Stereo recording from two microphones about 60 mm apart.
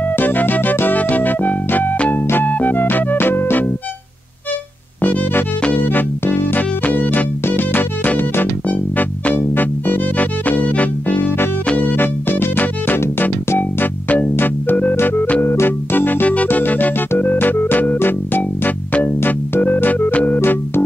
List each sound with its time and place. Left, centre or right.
0.0 s music: left
5.0 s music: left
14.3 s organ: left
15.4 s organ: left
16.4 s music: left
19.0 s organ: left
20.3 s music: left